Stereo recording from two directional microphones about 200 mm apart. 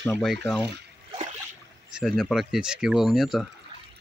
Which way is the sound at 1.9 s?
Centre (ahead or behind).